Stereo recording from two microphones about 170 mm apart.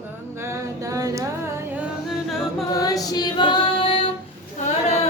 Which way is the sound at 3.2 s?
30° left (ahead or behind).